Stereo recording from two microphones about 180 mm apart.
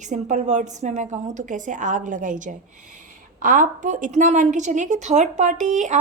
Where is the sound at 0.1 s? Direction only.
45° right (ahead or behind).